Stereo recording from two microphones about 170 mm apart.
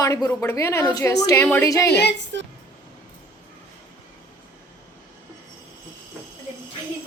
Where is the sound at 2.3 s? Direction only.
90° right.